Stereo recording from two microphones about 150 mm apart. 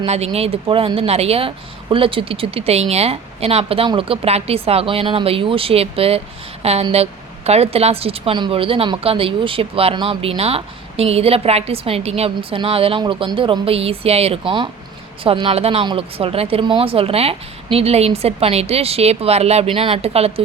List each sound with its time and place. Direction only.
0.0 s speech: 45° right (ahead or behind)